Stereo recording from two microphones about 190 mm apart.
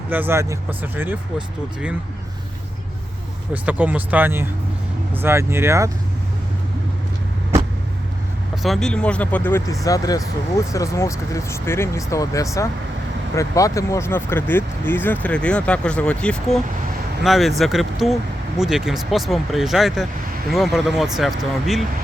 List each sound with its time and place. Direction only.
0.1 s speech: 10° right (ahead or behind)
3.5 s speech: 10° right (ahead or behind)
8.6 s speech: centre (ahead or behind)